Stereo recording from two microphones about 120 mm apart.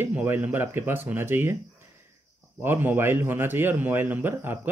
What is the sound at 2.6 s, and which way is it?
A man's voice, 20° right (ahead or behind).